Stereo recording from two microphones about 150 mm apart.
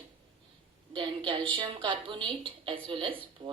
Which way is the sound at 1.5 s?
35° right (ahead or behind).